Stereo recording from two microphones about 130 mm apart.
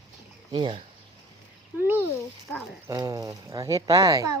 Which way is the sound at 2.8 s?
25° right (ahead or behind).